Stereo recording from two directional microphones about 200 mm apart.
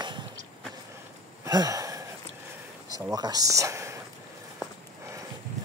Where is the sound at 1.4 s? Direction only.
20° right (ahead or behind).